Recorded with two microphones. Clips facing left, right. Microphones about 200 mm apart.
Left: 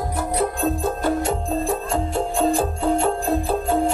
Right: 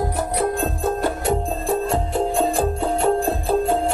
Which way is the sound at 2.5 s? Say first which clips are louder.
Left 1 dB; 60° right (ahead or behind).